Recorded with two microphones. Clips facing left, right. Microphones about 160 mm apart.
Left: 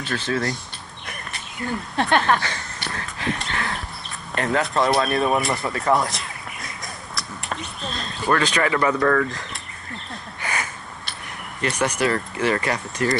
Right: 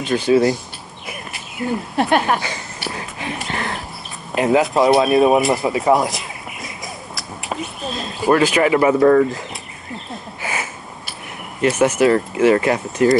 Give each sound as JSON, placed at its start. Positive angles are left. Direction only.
{"t": 0.0, "sound": "speech", "side_deg": -15}
{"t": 1.6, "sound": "speech", "side_deg": -15}
{"t": 4.6, "sound": "speech", "side_deg": 0}
{"t": 8.3, "sound": "speech", "side_deg": -20}
{"t": 10.4, "sound": "a sound", "side_deg": -10}
{"t": 11.6, "sound": "speech", "side_deg": -5}